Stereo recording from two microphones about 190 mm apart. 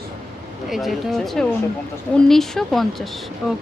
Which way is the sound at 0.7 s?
Centre (ahead or behind).